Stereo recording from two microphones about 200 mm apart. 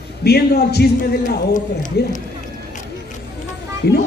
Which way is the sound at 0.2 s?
50° left (ahead or behind).